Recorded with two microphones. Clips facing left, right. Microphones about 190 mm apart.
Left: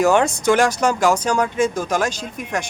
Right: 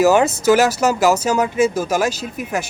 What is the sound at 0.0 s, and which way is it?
Speech, 5° right (ahead or behind).